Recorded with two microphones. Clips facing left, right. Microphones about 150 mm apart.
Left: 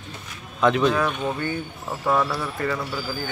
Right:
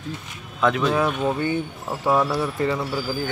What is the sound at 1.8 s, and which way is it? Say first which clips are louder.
Speech: right 1 dB; 15° right (ahead or behind).